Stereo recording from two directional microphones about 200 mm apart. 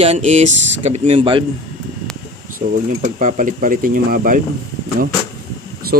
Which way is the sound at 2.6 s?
40° right (ahead or behind).